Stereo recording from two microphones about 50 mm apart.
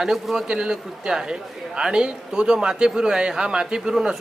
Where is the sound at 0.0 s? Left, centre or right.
Centre.